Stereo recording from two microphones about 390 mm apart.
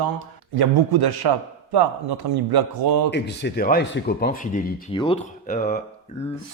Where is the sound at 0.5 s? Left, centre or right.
Right.